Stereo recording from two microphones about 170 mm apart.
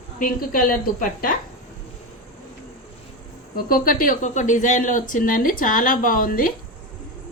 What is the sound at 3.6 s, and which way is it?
Speech, 55° left (ahead or behind).